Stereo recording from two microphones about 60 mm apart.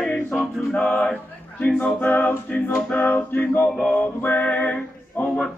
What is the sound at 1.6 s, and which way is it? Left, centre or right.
Music, left.